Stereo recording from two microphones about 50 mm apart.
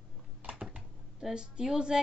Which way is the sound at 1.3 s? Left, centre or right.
Centre.